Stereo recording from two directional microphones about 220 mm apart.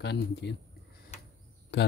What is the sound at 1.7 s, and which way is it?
Speech, 50° left (ahead or behind).